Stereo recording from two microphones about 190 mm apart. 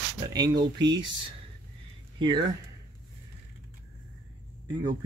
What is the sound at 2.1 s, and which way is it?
Speech, 25° right (ahead or behind).